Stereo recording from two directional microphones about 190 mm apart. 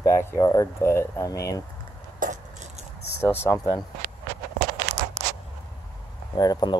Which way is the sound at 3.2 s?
10° left (ahead or behind).